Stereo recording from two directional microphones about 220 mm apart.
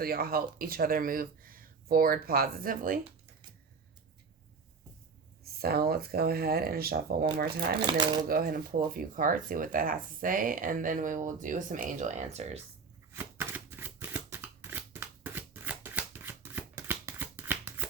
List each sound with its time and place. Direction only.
0.0 s speech: 45° right (ahead or behind)
5.4 s speech: 45° right (ahead or behind)
7.8 s speech: 20° right (ahead or behind)
8.3 s speech: 40° right (ahead or behind)
13.1 s shuffling cards: 10° right (ahead or behind)